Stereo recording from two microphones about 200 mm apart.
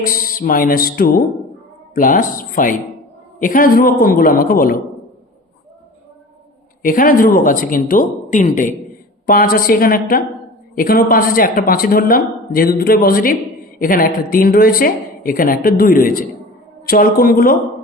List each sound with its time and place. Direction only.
0.0 s a man's voice: 45° left (ahead or behind)
6.8 s a man's voice: 45° left (ahead or behind)